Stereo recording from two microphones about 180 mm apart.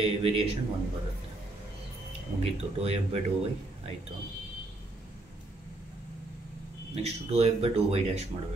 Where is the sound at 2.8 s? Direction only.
35° right (ahead or behind).